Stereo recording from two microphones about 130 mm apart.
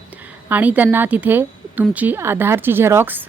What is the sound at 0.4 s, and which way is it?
A woman's voice, 15° right (ahead or behind).